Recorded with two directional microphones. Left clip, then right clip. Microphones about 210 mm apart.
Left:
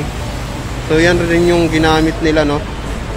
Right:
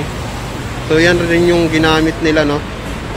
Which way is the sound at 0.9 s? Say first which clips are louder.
Right 1 dB; 5° left (ahead or behind).